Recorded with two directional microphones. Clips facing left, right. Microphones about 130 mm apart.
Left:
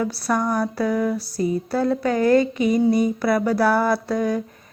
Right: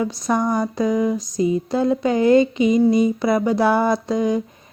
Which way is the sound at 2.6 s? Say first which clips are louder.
Right 3 dB; 55° left (ahead or behind).